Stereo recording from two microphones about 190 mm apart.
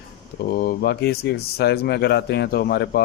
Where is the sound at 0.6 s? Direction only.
55° left (ahead or behind).